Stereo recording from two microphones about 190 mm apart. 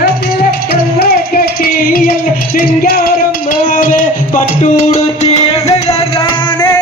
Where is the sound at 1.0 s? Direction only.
55° left (ahead or behind).